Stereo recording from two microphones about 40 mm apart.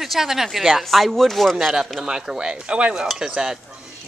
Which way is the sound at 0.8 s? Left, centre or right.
Centre.